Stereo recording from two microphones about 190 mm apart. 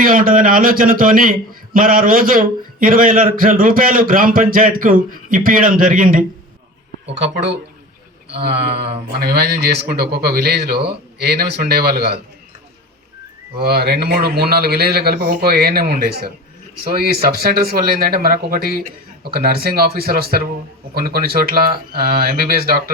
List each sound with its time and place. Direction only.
0.0 s a man's voice: 45° right (ahead or behind)
8.4 s a man's voice: 60° right (ahead or behind)
13.6 s a man's voice: 55° right (ahead or behind)